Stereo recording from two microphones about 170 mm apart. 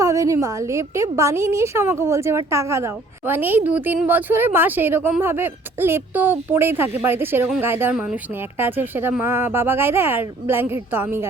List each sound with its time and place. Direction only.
0.0 s a woman's voice: 20° right (ahead or behind)